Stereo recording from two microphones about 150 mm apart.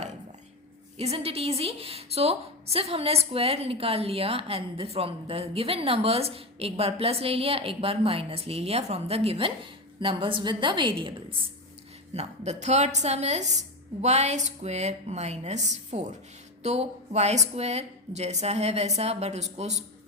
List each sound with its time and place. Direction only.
0.9 s a woman's voice: 40° right (ahead or behind)
12.1 s a woman's voice: 50° right (ahead or behind)